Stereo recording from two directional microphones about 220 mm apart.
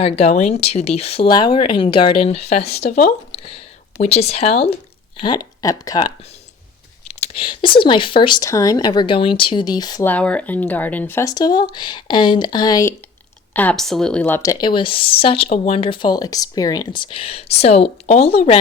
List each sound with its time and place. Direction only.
0.0 s speech: 30° left (ahead or behind)
7.1 s speech: 25° left (ahead or behind)